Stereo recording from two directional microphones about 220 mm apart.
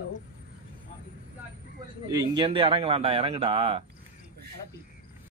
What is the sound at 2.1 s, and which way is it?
Speech, 15° right (ahead or behind).